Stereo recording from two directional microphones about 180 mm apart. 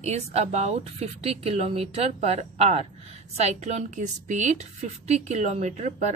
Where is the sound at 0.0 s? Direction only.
35° right (ahead or behind).